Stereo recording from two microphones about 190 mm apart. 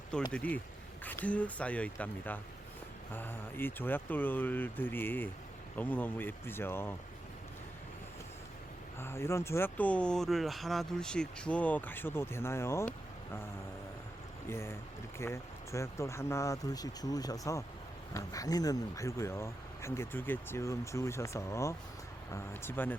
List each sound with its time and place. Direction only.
0.3 s speech: 5° left (ahead or behind)
9.0 s speech: 15° left (ahead or behind)
14.5 s speech: 15° left (ahead or behind)